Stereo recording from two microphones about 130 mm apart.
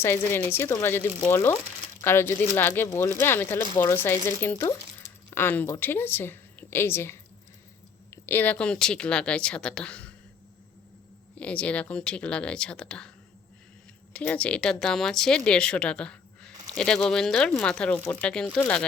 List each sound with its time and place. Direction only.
0.0 s speech: 20° left (ahead or behind)
11.3 s speech: 10° left (ahead or behind)
14.1 s speech: 10° left (ahead or behind)